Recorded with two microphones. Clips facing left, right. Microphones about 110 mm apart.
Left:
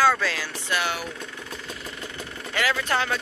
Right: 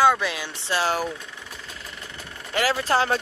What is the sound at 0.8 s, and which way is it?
Speech, 40° right (ahead or behind).